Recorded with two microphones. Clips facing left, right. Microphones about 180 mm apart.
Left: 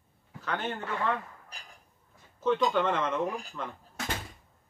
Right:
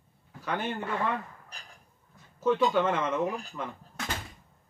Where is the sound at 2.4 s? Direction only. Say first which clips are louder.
Right 1 dB; 5° right (ahead or behind).